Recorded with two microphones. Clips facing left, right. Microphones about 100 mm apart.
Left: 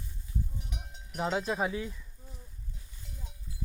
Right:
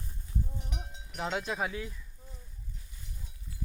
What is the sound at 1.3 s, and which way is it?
Speech, 25° left (ahead or behind).